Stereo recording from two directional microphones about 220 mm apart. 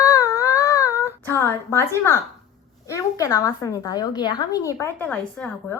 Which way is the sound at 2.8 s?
15° left (ahead or behind).